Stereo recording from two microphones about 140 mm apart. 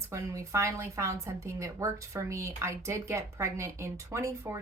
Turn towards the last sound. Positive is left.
turn(degrees=-20)  # may be behind; listen again after turning